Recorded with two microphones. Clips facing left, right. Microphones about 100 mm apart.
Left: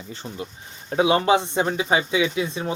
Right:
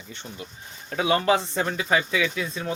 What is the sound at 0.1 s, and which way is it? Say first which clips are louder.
Speech: left 5 dB; 35° left (ahead or behind).